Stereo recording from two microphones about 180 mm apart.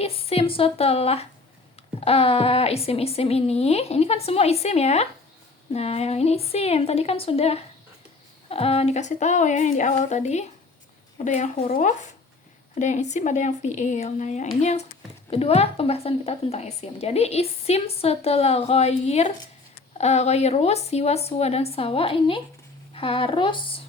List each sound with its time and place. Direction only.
0.0 s a woman's voice: 35° left (ahead or behind)